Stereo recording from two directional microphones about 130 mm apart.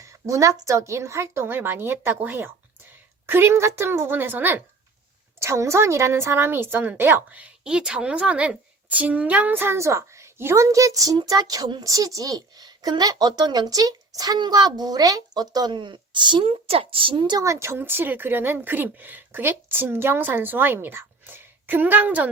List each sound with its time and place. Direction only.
0.0 s a woman's voice: 25° right (ahead or behind)